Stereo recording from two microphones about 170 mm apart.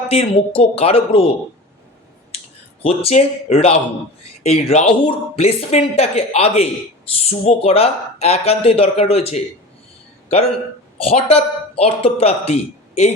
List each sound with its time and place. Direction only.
0.1 s speech: 35° left (ahead or behind)
2.8 s speech: 35° left (ahead or behind)